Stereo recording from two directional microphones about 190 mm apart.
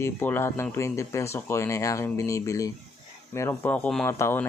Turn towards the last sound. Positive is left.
turn(degrees=10)  # may be behind; listen again after turning